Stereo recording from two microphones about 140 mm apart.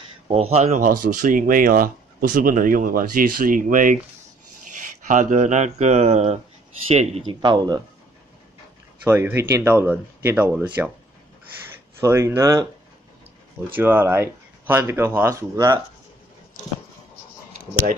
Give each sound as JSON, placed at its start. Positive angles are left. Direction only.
{"t": 0.3, "sound": "speech", "side_deg": -45}
{"t": 0.8, "sound": "speech", "side_deg": -75}
{"t": 5.0, "sound": "speech", "side_deg": -65}
{"t": 7.4, "sound": "speech", "side_deg": -30}
{"t": 9.0, "sound": "speech", "side_deg": -15}
{"t": 12.0, "sound": "speech", "side_deg": -20}
{"t": 13.7, "sound": "speech", "side_deg": -15}
{"t": 17.7, "sound": "speech", "side_deg": 15}